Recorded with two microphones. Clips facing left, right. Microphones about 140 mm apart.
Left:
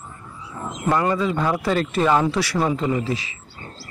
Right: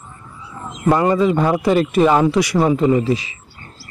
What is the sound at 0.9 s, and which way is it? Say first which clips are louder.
A man's voice: right 6 dB; 20° right (ahead or behind).